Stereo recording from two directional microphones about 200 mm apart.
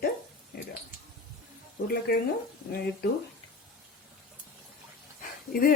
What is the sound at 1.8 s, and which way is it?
Speech, 50° left (ahead or behind).